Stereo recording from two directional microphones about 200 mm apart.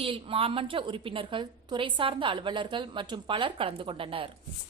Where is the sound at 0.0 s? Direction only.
25° right (ahead or behind).